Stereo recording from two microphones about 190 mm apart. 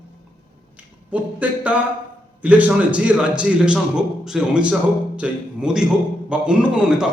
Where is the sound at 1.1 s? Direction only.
5° right (ahead or behind).